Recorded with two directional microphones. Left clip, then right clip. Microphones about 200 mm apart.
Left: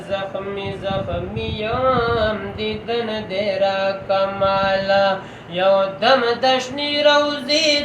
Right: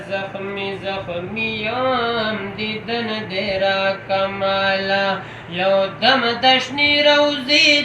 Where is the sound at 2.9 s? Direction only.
15° left (ahead or behind).